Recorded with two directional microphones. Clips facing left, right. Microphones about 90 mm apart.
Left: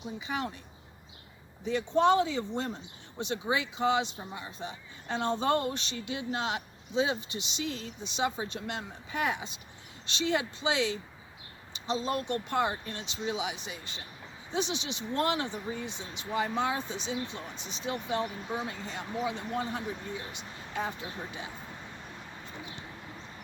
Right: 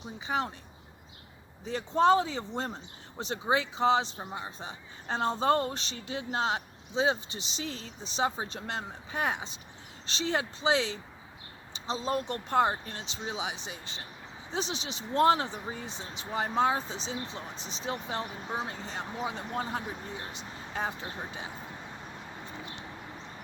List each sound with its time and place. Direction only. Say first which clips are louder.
0.0 s speech: right 2 dB; 35° right (ahead or behind)
1.6 s speech: right 1 dB; 35° right (ahead or behind)